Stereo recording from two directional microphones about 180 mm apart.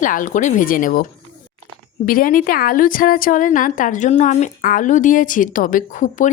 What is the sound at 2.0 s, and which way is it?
A woman's voice, 50° left (ahead or behind).